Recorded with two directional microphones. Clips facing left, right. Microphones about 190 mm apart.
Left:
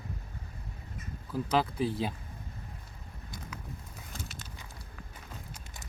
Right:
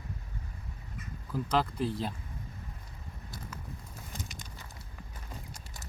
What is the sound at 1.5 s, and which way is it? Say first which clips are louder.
Speech: left 1 dB; 5° left (ahead or behind).